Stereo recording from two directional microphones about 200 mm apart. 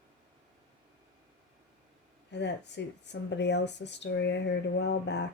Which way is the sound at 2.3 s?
60° left (ahead or behind).